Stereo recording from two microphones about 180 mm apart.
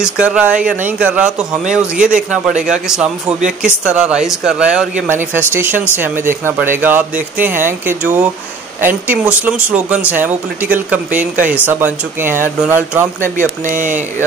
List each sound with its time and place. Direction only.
0.0 s speech: 5° right (ahead or behind)
2.1 s speech: 45° right (ahead or behind)
2.7 s speech: 5° right (ahead or behind)
13.7 s speech: 45° right (ahead or behind)